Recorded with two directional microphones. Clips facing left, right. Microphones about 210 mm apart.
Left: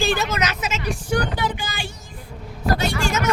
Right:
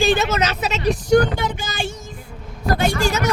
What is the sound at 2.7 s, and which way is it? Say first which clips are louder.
Speech: right 4 dB; 50° right (ahead or behind).